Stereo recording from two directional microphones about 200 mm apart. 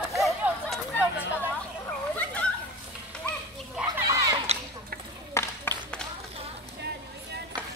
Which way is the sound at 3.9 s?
15° right (ahead or behind).